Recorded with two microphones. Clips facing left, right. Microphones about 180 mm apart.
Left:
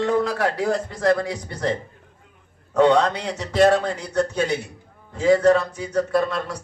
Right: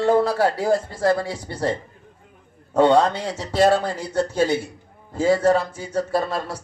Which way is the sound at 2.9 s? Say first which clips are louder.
Right 2 dB; 30° right (ahead or behind).